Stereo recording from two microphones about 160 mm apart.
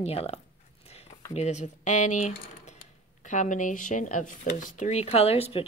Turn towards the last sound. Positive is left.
turn(degrees=40)  # may be behind; listen again after turning